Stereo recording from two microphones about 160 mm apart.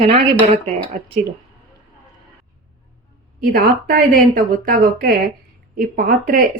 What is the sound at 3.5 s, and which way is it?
A woman's voice, 65° right (ahead or behind).